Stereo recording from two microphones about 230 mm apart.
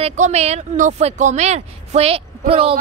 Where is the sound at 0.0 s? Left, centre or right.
Right.